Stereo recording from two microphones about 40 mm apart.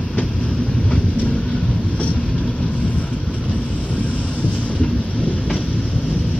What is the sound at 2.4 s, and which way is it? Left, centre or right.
Vehicle, left.